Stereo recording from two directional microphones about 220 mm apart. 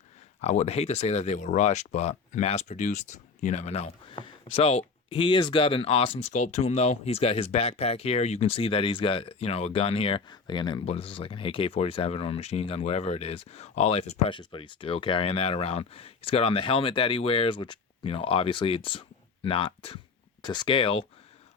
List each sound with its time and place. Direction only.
0.4 s speech: 30° left (ahead or behind)